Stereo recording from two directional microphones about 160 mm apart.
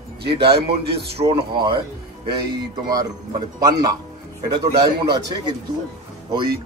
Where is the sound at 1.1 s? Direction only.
35° right (ahead or behind).